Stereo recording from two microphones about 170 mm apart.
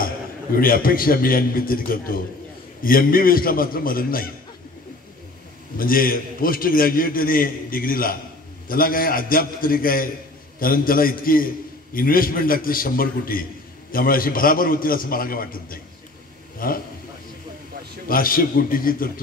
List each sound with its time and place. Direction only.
0.0 s a man's voice: 55° left (ahead or behind)
5.8 s a man's voice: 55° left (ahead or behind)
18.0 s a man's voice: 55° left (ahead or behind)